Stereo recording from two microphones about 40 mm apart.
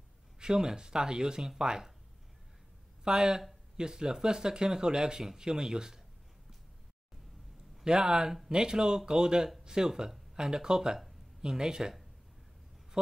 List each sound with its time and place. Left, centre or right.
0.4 s speech: centre
3.0 s speech: centre
7.8 s speech: centre
13.0 s speech: right